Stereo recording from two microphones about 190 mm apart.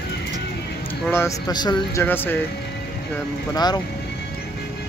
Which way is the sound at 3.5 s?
20° left (ahead or behind).